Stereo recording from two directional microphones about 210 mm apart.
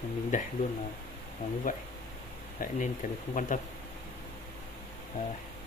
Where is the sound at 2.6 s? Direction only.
40° left (ahead or behind).